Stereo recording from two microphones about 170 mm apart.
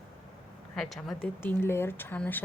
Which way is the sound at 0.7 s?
Centre (ahead or behind).